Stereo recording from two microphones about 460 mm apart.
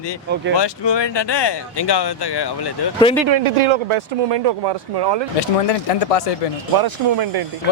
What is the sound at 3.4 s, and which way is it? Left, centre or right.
Speech, right.